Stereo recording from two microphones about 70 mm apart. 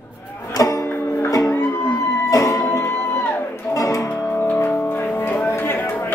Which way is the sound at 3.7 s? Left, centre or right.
Left.